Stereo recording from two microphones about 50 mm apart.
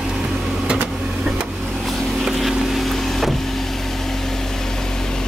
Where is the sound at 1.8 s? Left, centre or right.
Centre.